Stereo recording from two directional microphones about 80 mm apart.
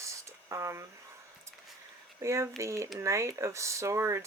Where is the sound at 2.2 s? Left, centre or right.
Right.